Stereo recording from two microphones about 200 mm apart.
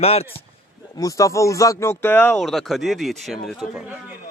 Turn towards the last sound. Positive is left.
turn(degrees=-5)  # may be behind; listen again after turning